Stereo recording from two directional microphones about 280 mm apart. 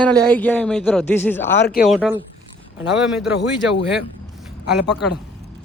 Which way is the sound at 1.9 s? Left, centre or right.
Centre.